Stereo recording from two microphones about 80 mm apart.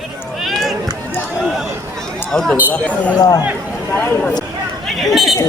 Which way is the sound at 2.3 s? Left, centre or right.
Centre.